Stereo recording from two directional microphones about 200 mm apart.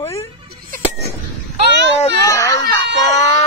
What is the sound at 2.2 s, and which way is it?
Speech, 15° left (ahead or behind).